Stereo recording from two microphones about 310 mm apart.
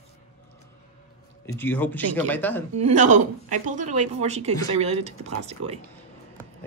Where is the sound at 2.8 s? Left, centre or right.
Right.